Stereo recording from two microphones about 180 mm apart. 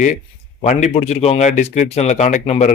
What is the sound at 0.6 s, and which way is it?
A man's voice, 40° left (ahead or behind).